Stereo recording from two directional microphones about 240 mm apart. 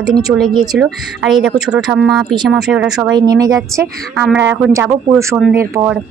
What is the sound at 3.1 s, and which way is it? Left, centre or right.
A woman's voice, centre.